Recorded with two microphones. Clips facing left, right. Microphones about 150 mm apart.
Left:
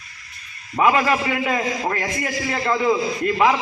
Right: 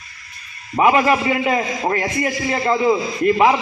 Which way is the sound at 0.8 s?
20° right (ahead or behind).